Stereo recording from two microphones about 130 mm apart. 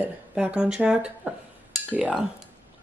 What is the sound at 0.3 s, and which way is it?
Speech, 5° right (ahead or behind).